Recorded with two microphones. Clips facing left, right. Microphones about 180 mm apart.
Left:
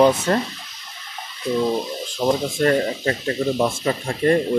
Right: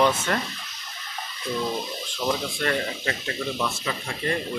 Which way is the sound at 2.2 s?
50° left (ahead or behind).